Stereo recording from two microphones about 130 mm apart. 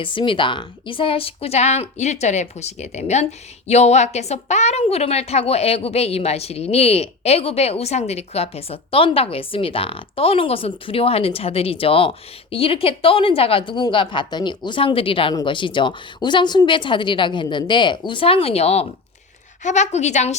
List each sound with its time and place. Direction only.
0.0 s a woman's voice: 40° left (ahead or behind); by 20.3 s 60° left (ahead or behind)